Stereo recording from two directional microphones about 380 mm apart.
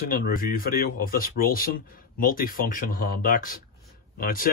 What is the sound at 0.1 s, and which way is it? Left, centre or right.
Speech, left.